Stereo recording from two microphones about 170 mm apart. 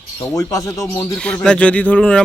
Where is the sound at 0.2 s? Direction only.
20° left (ahead or behind).